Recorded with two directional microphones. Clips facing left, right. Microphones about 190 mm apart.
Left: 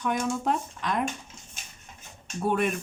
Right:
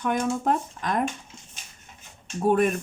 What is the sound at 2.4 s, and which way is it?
Speech, 45° right (ahead or behind).